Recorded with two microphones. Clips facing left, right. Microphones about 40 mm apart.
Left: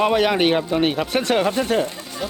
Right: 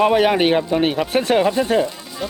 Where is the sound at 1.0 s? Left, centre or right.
Centre.